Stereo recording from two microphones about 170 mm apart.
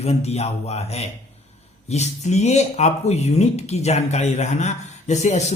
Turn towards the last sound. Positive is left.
turn(degrees=40)  # may be behind; listen again after turning